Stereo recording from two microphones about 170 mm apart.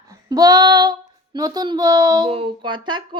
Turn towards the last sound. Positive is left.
turn(degrees=-25)  # may be behind; listen again after turning